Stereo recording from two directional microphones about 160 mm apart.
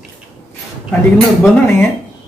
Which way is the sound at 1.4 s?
15° left (ahead or behind).